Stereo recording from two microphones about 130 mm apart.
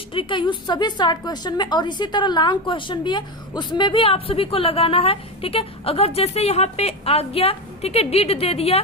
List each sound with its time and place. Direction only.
0.1 s a woman's voice: 40° left (ahead or behind)